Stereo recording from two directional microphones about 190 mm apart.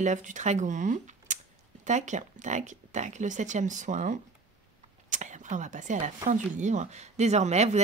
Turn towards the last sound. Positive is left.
turn(degrees=-35)  # may be behind; listen again after turning